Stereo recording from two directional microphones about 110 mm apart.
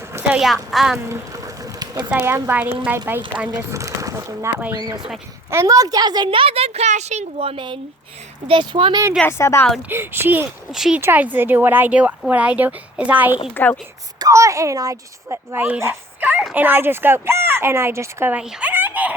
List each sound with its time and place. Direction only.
0.3 s a woman's voice: 5° right (ahead or behind)
1.1 s a sound: 30° right (ahead or behind)
2.2 s speech: 20° right (ahead or behind)
3.5 s a woman's voice: 30° right (ahead or behind); by 9.0 s 50° right (ahead or behind)
9.2 s a woman's voice: 25° left (ahead or behind)
9.9 s speech: 20° right (ahead or behind)
10.7 s a woman's voice: 5° right (ahead or behind)
11.0 s speech: 15° right (ahead or behind)
13.5 s a woman's voice: 15° left (ahead or behind)
14.2 s speech: 30° right (ahead or behind)
15.5 s speech: 15° right (ahead or behind)
18.3 s speech: 5° right (ahead or behind)
18.7 s chicken: 15° right (ahead or behind)